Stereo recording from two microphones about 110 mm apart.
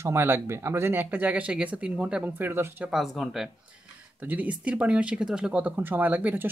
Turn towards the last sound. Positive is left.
turn(degrees=-15)  # may be behind; listen again after turning